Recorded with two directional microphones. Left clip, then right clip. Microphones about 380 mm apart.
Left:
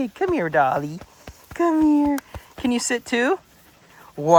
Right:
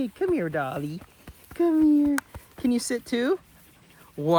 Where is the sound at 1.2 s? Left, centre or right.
Centre.